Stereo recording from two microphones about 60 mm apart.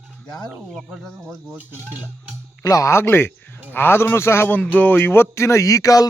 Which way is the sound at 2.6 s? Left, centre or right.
Left.